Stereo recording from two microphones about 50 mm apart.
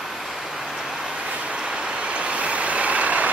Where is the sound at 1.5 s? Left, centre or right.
Right.